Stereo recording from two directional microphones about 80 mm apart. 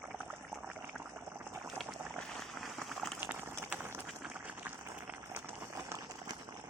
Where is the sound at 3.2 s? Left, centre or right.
Right.